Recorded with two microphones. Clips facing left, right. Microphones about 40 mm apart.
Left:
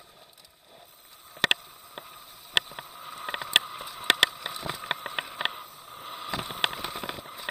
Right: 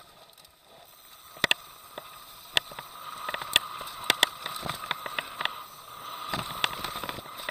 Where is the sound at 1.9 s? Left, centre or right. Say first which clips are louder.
Even; left.